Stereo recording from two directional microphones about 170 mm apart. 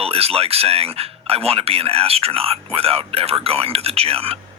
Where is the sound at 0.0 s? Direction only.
35° right (ahead or behind).